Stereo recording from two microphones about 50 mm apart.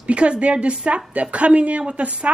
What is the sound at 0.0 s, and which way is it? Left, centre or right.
Speech, right.